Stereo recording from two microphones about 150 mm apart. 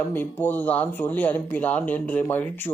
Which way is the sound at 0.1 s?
15° left (ahead or behind).